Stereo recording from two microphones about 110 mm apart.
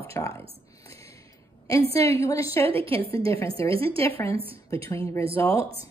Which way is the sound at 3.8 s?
55° right (ahead or behind).